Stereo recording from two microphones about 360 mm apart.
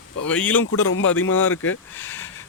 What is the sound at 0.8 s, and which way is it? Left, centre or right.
Speech, left.